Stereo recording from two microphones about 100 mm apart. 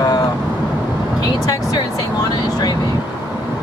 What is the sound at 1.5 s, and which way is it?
Speech, 40° left (ahead or behind).